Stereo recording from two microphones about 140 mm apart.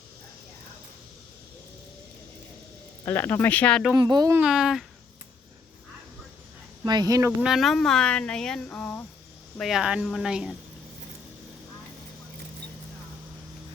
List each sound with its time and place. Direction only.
3.0 s speech: 15° left (ahead or behind)
3.9 s speech: 25° right (ahead or behind)
4.4 s speech: 5° right (ahead or behind)
6.8 s speech: 30° right (ahead or behind)
7.4 s speech: centre (ahead or behind)
9.6 s speech: centre (ahead or behind)